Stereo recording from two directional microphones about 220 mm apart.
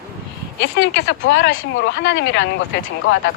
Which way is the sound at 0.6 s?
60° left (ahead or behind).